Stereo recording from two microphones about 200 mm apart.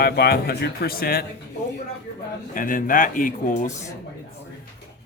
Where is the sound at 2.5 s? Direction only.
45° left (ahead or behind).